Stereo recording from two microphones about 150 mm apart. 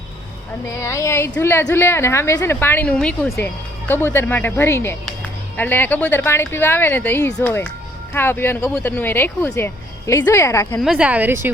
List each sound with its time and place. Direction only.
0.8 s a woman's voice: 20° left (ahead or behind)
10.8 s a woman's voice: 5° right (ahead or behind)